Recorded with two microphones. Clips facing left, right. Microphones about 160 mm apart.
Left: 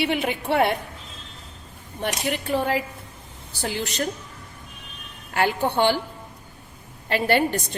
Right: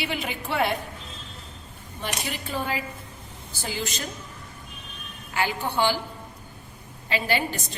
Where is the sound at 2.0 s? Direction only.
65° left (ahead or behind).